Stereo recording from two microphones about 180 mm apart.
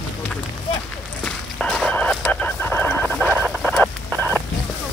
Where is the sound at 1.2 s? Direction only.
5° left (ahead or behind).